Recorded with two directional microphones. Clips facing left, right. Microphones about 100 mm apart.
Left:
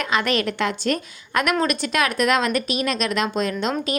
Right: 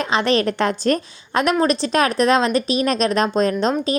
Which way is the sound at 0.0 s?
30° right (ahead or behind).